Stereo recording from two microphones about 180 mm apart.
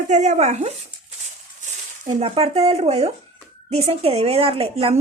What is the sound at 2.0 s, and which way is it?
A woman's voice, 40° right (ahead or behind).